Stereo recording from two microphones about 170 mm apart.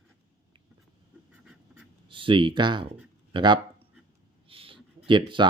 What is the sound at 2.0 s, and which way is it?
Speech, 30° right (ahead or behind).